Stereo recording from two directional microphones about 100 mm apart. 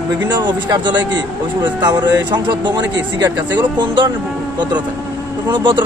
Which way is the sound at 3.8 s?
55° right (ahead or behind).